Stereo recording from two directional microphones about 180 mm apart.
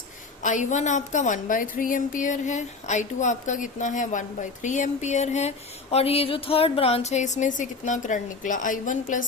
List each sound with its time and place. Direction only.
0.4 s a woman's voice: 45° left (ahead or behind)